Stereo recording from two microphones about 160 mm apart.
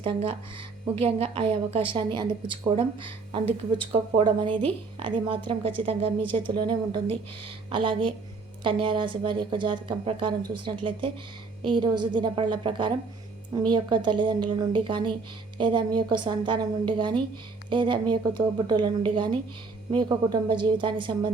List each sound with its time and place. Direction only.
0.0 s a woman's voice: 35° right (ahead or behind)
4.9 s a woman's voice: 30° right (ahead or behind)